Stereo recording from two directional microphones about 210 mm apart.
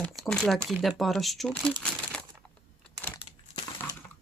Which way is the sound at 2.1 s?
5° left (ahead or behind).